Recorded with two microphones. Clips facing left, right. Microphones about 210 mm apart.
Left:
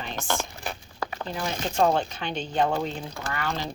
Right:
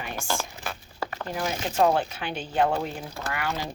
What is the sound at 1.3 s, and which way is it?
Speech, 5° right (ahead or behind).